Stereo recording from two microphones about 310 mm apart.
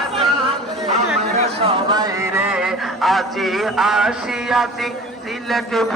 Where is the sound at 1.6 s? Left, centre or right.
Centre.